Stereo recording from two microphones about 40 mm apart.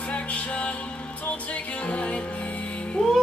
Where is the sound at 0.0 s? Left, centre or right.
Left.